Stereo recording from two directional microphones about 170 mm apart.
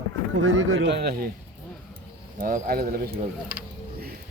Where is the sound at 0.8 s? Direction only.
85° right.